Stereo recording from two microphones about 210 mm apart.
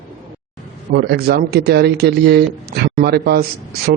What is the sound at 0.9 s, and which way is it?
Speech, 50° right (ahead or behind).